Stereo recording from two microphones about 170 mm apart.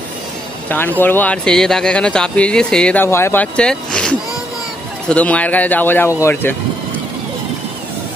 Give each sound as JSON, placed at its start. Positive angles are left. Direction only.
{"t": 0.7, "sound": "speech", "side_deg": 10}